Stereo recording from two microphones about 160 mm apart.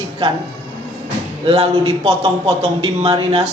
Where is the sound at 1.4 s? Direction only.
35° right (ahead or behind).